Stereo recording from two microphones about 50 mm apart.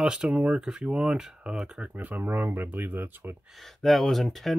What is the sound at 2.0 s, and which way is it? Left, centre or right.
Speech, right.